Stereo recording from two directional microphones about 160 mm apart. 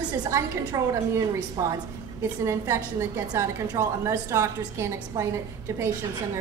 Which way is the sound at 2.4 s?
15° right (ahead or behind).